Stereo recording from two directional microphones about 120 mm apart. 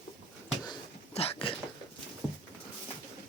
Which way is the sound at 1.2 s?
55° left (ahead or behind).